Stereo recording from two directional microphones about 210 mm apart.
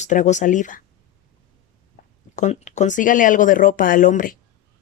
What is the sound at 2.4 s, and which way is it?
Speech, 35° left (ahead or behind).